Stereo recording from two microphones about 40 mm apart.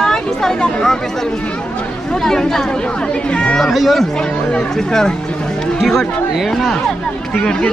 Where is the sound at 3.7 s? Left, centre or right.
Centre.